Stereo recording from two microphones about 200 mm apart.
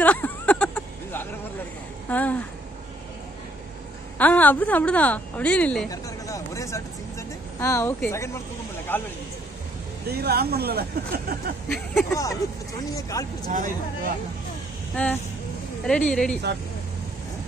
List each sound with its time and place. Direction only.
0.0 s a sound: 5° left (ahead or behind)
2.0 s speech: 10° left (ahead or behind)
4.2 s a woman's voice: 10° left (ahead or behind)
5.9 s vehicle: 15° left (ahead or behind)
8.9 s a woman's voice: 10° left (ahead or behind)
10.0 s speech: 50° right (ahead or behind)
11.7 s speech: centre (ahead or behind)
12.1 s a woman's voice: 15° left (ahead or behind)
13.5 s speech: 40° right (ahead or behind)
15.0 s a woman's voice: 5° left (ahead or behind)